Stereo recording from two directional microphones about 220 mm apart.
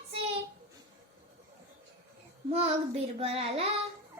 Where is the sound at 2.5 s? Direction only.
25° right (ahead or behind).